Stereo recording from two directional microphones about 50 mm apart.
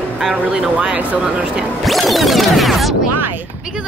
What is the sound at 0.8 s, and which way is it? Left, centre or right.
Speech, right.